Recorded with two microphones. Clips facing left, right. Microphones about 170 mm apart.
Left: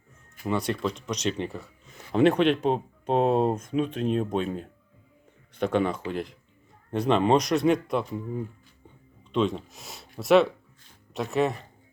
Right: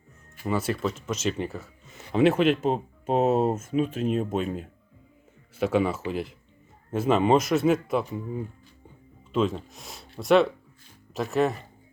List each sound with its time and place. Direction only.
0.4 s speech: 5° right (ahead or behind)